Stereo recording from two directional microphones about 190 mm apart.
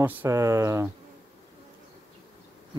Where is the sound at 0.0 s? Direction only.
10° right (ahead or behind).